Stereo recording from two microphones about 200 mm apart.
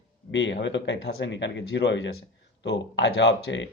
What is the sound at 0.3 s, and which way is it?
A man's voice, 60° left (ahead or behind).